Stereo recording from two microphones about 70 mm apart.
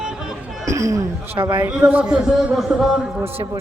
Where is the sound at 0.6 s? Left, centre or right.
Right.